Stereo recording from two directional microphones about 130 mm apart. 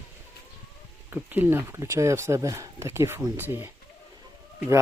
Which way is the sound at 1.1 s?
15° right (ahead or behind).